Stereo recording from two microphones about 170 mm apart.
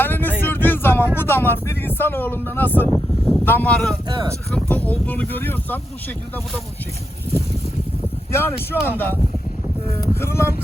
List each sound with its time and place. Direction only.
0.0 s vehicle: 10° left (ahead or behind)
1.1 s speech: 10° left (ahead or behind)
2.9 s speech: centre (ahead or behind)
3.4 s speech: 10° left (ahead or behind)
4.1 s speech: 25° right (ahead or behind)
4.5 s speech: 10° left (ahead or behind)
8.3 s speech: 15° left (ahead or behind)
10.2 s speech: 15° left (ahead or behind)